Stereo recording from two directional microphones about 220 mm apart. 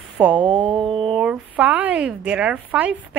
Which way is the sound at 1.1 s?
5° right (ahead or behind).